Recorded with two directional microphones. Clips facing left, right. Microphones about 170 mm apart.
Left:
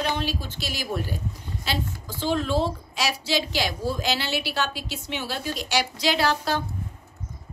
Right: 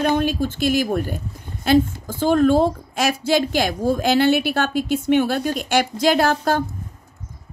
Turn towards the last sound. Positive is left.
turn(degrees=-50)  # may be behind; listen again after turning